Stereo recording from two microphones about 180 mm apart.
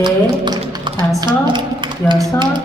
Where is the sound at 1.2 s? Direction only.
25° right (ahead or behind).